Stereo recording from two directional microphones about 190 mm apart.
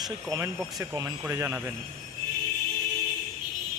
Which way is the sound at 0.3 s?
15° right (ahead or behind).